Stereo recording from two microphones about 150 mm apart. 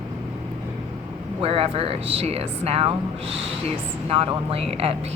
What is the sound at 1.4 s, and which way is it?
Speech, 40° right (ahead or behind).